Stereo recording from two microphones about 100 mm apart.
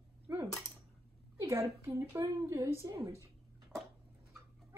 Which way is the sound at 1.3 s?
25° right (ahead or behind).